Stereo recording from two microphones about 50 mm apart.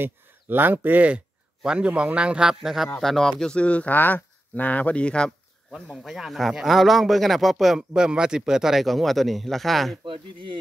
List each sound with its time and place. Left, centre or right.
0.0 s speech: right
1.6 s a man's voice: centre
2.6 s speech: centre
3.0 s speech: centre
3.5 s speech: left
3.9 s speech: left
6.0 s speech: centre